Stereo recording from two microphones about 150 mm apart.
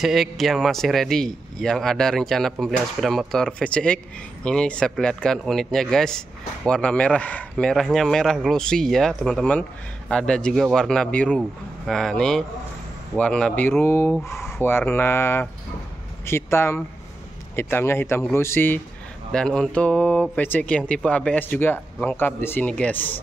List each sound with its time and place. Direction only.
0.0 s a man's voice: centre (ahead or behind); by 18.8 s 15° left (ahead or behind)
19.3 s speech: 5° left (ahead or behind)